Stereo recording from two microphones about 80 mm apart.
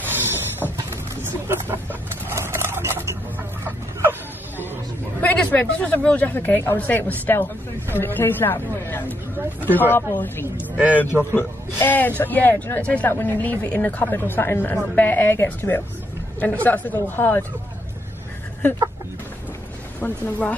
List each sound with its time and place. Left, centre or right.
0.0 s a sound: right
3.6 s chicken: right
5.2 s speech: centre
9.4 s speech: right
10.1 s speech: left
10.4 s speech: centre
11.3 s speech: left
20.0 s speech: centre